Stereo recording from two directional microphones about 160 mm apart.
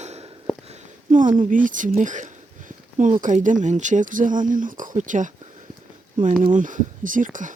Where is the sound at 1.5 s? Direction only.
55° right (ahead or behind).